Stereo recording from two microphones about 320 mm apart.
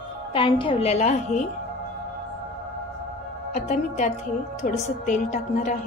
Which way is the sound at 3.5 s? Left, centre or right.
Left.